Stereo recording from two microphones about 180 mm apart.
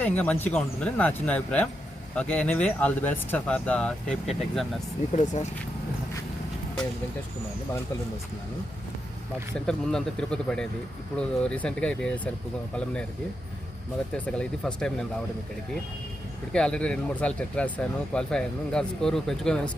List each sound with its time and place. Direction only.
0.0 s speech: 10° left (ahead or behind)
5.1 s speech: 40° left (ahead or behind)
9.6 s speech: 5° left (ahead or behind)
14.1 s speech: 5° left (ahead or behind)
16.5 s speech: 5° left (ahead or behind)